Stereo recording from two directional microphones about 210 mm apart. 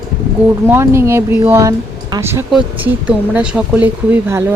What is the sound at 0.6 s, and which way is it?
Speech, 10° right (ahead or behind).